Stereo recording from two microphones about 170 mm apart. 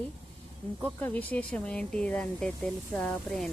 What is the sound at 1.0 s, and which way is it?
Speech, 10° left (ahead or behind).